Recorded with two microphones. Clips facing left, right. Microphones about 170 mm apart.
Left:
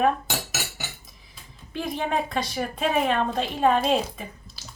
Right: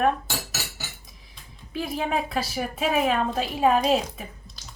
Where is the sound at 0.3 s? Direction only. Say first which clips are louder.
Left 2 dB; 20° left (ahead or behind).